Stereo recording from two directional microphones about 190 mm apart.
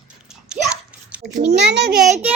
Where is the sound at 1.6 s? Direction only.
65° right (ahead or behind).